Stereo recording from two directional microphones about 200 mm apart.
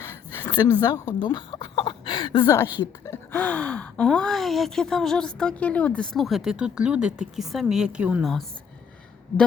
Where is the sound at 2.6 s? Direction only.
10° right (ahead or behind).